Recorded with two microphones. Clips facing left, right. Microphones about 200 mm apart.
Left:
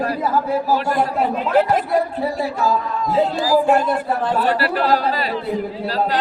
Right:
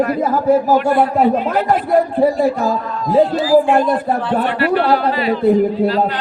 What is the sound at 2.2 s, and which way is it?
Speech, 50° right (ahead or behind).